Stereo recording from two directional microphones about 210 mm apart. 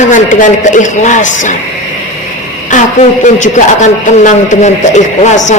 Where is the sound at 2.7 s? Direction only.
40° left (ahead or behind).